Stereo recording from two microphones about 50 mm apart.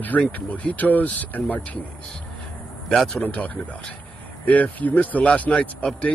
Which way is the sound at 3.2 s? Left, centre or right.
Left.